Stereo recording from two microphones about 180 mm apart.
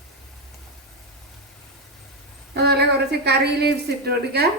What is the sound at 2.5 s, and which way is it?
A woman's voice, 65° right (ahead or behind).